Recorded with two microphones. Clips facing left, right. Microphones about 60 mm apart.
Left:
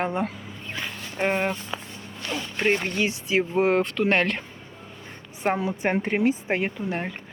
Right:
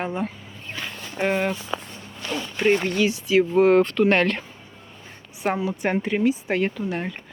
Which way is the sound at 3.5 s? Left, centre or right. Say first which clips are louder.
Right 5 dB; centre.